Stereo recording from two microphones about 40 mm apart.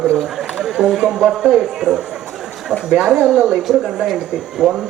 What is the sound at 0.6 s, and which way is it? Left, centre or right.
Speech, centre.